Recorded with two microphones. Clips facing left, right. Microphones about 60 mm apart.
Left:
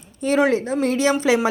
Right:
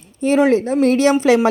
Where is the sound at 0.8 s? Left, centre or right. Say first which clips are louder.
Right 6 dB; right.